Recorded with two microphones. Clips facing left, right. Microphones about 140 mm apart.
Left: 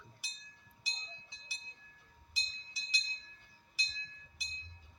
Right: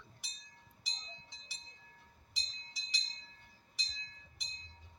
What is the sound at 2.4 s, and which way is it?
Music, centre (ahead or behind).